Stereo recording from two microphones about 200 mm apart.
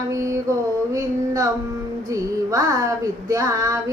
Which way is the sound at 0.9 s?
15° right (ahead or behind).